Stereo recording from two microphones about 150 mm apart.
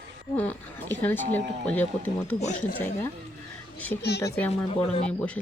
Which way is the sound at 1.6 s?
10° left (ahead or behind).